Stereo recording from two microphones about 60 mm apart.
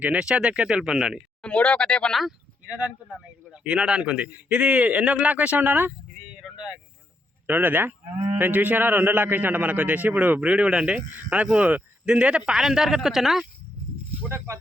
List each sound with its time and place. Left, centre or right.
0.0 s speech: centre
1.4 s speech: left
3.6 s a man's voice: centre
6.1 s a sound: centre
7.4 s a man's voice: right; by 13.5 s centre
14.3 s speech: right